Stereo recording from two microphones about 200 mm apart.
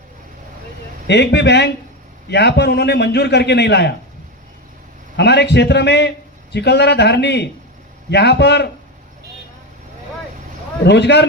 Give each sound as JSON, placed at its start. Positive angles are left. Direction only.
{"t": 1.0, "sound": "a man's voice", "side_deg": 60}
{"t": 5.1, "sound": "a man's voice", "side_deg": 60}
{"t": 10.8, "sound": "a man's voice", "side_deg": 60}